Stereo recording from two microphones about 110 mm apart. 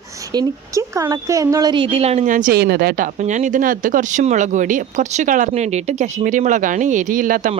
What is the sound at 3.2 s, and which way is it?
Speech, 90° right.